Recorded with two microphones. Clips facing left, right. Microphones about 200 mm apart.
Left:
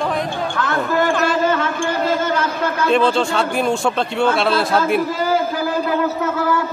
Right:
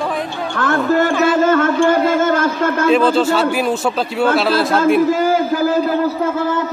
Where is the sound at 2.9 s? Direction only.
5° right (ahead or behind).